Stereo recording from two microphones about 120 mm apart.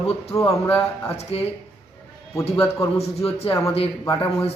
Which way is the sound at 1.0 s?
60° left (ahead or behind).